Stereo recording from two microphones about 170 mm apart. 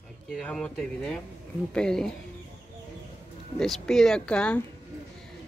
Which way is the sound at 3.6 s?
5° left (ahead or behind).